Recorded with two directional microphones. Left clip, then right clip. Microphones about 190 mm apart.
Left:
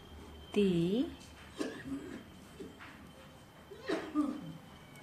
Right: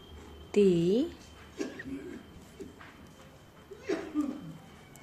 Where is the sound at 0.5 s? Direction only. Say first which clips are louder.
Right 7 dB; 30° right (ahead or behind).